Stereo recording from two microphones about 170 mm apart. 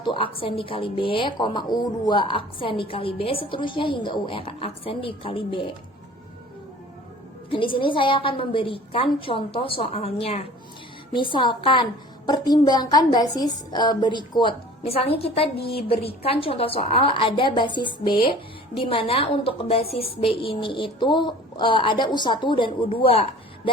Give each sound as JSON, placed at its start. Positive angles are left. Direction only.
{"t": 0.0, "sound": "a woman's voice", "side_deg": 30}
{"t": 7.5, "sound": "a woman's voice", "side_deg": 30}